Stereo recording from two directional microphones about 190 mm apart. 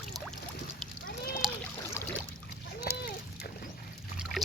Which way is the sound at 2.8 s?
55° left (ahead or behind).